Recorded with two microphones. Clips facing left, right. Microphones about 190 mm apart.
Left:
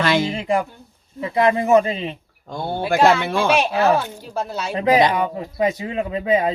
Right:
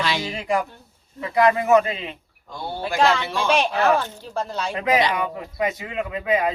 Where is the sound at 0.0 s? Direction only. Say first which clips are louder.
Left 6 dB; 55° left (ahead or behind).